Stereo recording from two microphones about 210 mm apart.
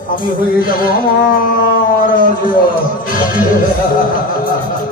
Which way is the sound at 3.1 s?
40° left (ahead or behind).